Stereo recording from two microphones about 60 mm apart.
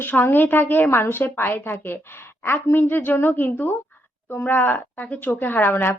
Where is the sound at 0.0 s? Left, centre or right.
Left.